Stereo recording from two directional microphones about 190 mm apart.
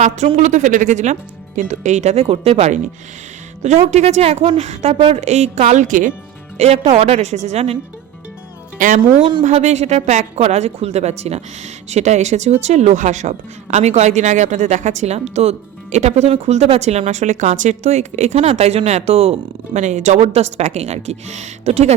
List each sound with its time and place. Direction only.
0.0 s a woman's voice: 35° right (ahead or behind)
8.8 s a woman's voice: 40° right (ahead or behind)